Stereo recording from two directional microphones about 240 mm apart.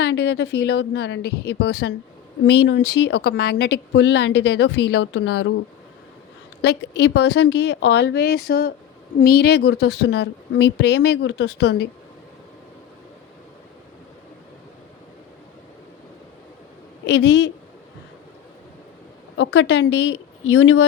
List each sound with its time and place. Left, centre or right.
0.0 s speech: left
6.6 s speech: left
17.2 s speech: left
19.4 s speech: left